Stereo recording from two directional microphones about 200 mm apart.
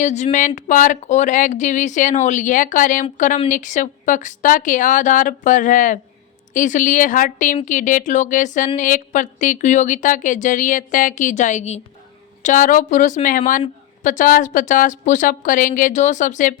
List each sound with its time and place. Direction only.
0.0 s a woman's voice: 35° left (ahead or behind)